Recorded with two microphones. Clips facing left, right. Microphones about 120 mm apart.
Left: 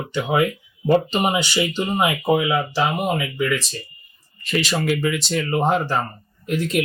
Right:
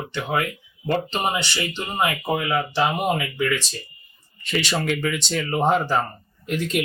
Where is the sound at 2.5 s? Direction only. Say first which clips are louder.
Left 1 dB; centre (ahead or behind).